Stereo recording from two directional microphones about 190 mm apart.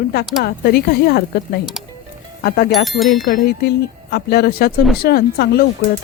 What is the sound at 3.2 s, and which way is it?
Speech, 50° left (ahead or behind).